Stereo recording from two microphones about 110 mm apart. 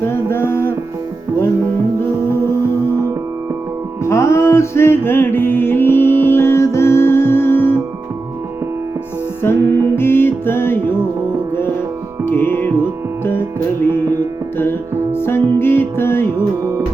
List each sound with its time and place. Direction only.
0.3 s music: 20° left (ahead or behind)
4.0 s music: 25° left (ahead or behind)
9.4 s music: 20° left (ahead or behind)
12.3 s music: 20° left (ahead or behind)
14.6 s music: 20° left (ahead or behind)